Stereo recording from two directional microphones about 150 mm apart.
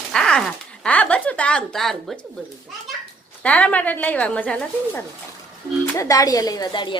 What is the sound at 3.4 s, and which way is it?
Speech, 10° left (ahead or behind).